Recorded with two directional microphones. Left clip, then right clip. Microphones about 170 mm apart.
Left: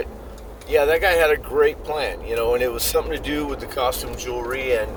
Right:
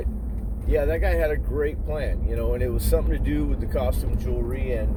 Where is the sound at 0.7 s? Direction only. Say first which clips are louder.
Left 7 dB; 15° left (ahead or behind).